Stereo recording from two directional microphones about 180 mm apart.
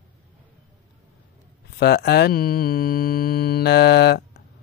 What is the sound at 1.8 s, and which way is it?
Mantra, 65° left (ahead or behind).